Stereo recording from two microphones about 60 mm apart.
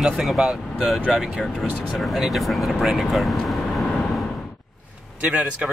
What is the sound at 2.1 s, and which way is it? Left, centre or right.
Speech, centre.